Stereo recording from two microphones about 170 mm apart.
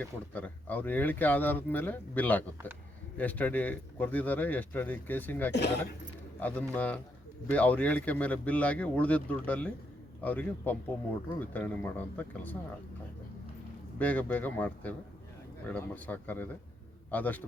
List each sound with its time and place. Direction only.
0.0 s speech: 10° left (ahead or behind)
14.0 s speech: 10° left (ahead or behind)